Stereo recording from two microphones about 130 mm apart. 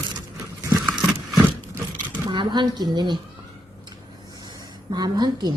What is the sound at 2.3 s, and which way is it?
Speech, 35° right (ahead or behind).